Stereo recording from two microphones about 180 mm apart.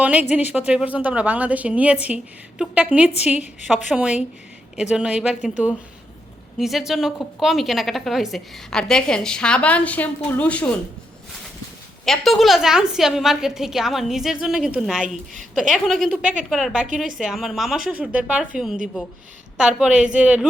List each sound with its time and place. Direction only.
0.0 s a woman's voice: 5° right (ahead or behind); by 10.7 s 10° left (ahead or behind)
12.0 s a woman's voice: centre (ahead or behind)
15.0 s a woman's voice: 45° right (ahead or behind)
15.7 s a woman's voice: centre (ahead or behind)